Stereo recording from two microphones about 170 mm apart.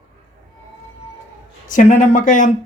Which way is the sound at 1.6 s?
50° left (ahead or behind).